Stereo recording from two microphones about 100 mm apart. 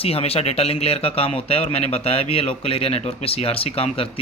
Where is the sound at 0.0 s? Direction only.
85° left.